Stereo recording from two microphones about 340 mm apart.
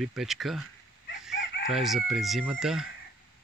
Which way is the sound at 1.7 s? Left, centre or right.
Centre.